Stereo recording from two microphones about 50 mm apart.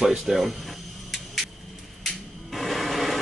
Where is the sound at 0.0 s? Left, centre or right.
Centre.